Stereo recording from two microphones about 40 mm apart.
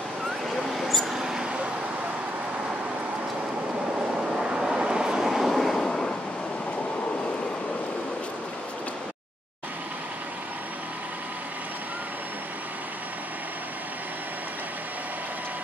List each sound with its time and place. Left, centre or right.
0.6 s a sound: centre
1.1 s vehicle: centre
4.2 s vehicle: centre
5.2 s vehicle: centre
5.9 s waves: centre